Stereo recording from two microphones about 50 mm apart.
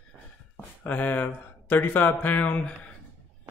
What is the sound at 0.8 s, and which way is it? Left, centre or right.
Speech, left.